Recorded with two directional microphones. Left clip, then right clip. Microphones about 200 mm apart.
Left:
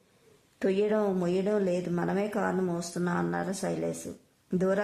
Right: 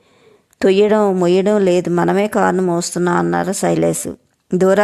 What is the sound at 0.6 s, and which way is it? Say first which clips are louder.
A woman's voice: right 15 dB; 45° right (ahead or behind).